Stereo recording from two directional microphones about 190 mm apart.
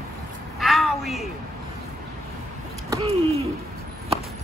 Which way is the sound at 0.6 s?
Centre (ahead or behind).